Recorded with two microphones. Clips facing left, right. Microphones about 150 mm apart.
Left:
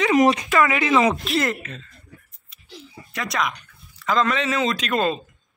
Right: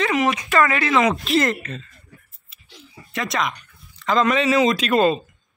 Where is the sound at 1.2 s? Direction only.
Centre (ahead or behind).